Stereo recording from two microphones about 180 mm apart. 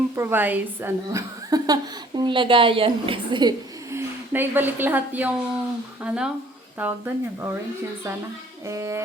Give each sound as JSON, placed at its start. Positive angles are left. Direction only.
{"t": 0.2, "sound": "a woman's voice", "side_deg": -10}
{"t": 3.9, "sound": "a woman's voice", "side_deg": -10}
{"t": 8.6, "sound": "speech", "side_deg": -15}